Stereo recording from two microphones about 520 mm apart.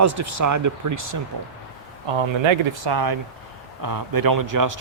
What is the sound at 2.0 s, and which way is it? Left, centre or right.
Speech, right.